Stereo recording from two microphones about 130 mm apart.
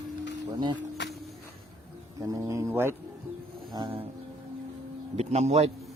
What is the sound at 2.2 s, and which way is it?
Speech, 25° right (ahead or behind).